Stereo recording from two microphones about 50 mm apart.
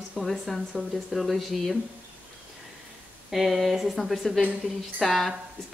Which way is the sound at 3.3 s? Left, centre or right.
Centre.